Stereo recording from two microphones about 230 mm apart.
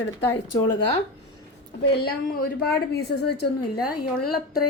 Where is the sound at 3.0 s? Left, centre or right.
Left.